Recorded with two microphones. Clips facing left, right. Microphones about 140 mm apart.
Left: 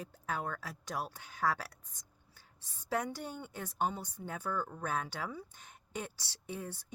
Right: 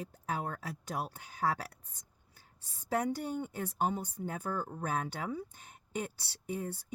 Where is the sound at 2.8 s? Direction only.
35° right (ahead or behind).